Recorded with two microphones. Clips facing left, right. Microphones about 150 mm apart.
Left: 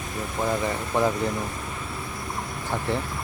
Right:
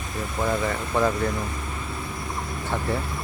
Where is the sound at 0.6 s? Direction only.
15° left (ahead or behind).